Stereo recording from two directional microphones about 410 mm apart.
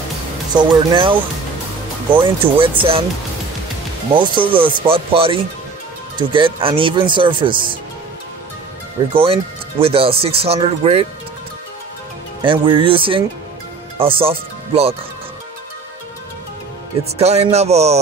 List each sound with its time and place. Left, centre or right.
0.6 s speech: centre
4.1 s speech: centre
9.1 s speech: centre
12.4 s speech: centre
17.2 s speech: centre